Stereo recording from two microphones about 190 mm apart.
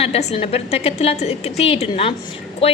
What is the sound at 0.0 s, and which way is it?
A woman's voice, 35° left (ahead or behind).